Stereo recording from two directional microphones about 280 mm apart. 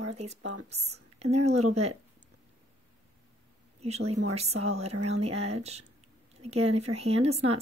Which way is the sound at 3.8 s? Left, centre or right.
Right.